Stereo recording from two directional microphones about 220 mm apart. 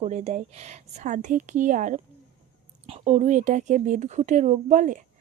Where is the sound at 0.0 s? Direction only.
30° right (ahead or behind).